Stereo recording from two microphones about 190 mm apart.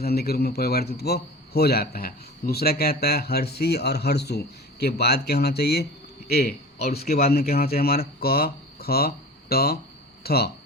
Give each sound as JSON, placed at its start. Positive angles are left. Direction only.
{"t": 0.0, "sound": "a man's voice", "side_deg": 55}
{"t": 6.7, "sound": "speech", "side_deg": 35}
{"t": 7.3, "sound": "a man's voice", "side_deg": 55}